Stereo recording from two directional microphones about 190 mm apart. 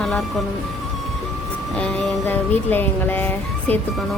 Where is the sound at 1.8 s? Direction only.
5° left (ahead or behind).